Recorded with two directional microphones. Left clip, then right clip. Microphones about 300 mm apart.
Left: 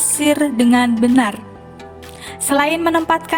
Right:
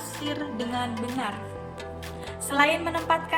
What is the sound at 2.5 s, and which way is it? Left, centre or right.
Music, left.